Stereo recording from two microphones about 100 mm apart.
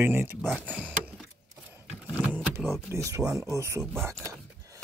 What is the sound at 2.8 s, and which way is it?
Speech, 30° right (ahead or behind).